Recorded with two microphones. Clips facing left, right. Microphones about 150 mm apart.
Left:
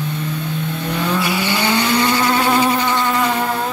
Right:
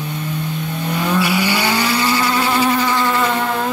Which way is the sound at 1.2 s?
10° right (ahead or behind).